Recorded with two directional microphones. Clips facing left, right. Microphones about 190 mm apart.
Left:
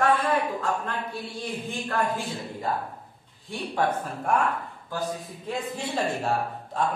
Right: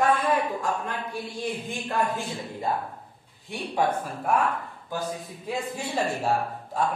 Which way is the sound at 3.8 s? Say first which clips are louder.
Right 1 dB; 15° right (ahead or behind).